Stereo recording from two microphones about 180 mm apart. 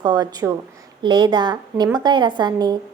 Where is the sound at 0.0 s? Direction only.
20° right (ahead or behind).